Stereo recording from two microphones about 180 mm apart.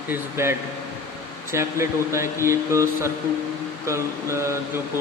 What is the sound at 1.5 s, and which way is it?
Speech, 15° right (ahead or behind).